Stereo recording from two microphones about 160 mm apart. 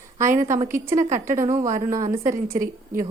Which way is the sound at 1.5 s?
55° right (ahead or behind).